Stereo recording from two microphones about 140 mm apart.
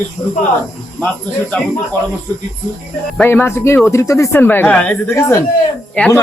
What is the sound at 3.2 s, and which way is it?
Speech, 10° left (ahead or behind).